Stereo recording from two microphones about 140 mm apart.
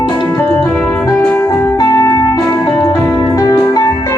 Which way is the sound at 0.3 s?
15° left (ahead or behind).